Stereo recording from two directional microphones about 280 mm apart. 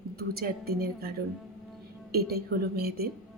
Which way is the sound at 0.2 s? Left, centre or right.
Right.